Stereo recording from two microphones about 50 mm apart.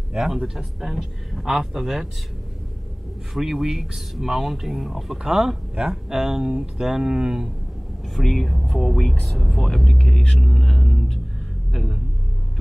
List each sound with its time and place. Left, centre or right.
0.1 s speech: centre
3.3 s speech: centre
8.2 s speech: centre
10.3 s speech: centre